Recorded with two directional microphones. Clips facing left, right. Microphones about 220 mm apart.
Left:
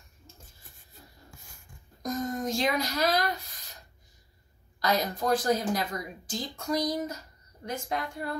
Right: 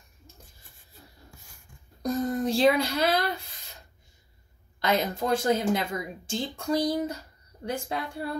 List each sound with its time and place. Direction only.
2.4 s a woman's voice: 30° right (ahead or behind)
4.7 s a woman's voice: 25° right (ahead or behind)